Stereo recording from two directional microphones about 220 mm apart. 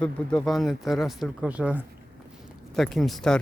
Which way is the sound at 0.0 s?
5° left (ahead or behind).